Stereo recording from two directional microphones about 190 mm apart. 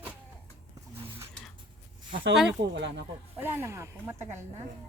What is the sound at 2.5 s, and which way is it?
Speech, 70° right (ahead or behind).